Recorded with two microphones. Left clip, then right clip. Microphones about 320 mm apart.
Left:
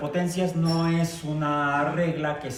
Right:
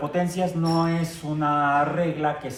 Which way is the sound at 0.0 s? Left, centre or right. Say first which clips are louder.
Right 2 dB; centre.